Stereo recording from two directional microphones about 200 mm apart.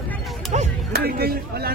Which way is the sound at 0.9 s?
50° right (ahead or behind).